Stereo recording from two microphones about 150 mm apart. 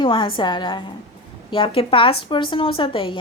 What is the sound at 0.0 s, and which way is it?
A woman's voice, 35° left (ahead or behind).